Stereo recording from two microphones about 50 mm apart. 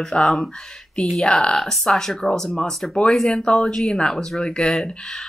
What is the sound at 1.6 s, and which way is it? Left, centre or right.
A woman's voice, centre.